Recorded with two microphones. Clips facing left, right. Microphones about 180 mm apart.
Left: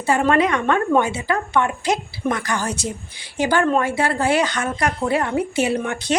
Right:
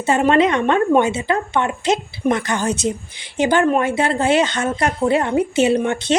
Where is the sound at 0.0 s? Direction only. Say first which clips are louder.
Right 3 dB; 20° right (ahead or behind).